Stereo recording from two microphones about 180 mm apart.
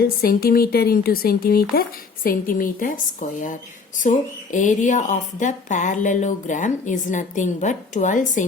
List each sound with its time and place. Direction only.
0.0 s speech: 55° left (ahead or behind)